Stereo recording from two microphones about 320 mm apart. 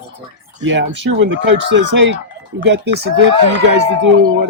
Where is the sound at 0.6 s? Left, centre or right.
Right.